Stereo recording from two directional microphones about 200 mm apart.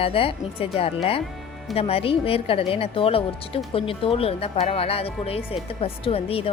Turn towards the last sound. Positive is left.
turn(degrees=30)  # may be behind; listen again after turning